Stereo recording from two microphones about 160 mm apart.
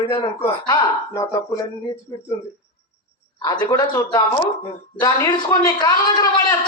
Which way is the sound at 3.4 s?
25° left (ahead or behind).